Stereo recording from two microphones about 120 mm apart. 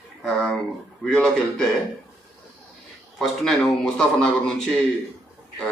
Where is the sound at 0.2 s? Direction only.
5° left (ahead or behind).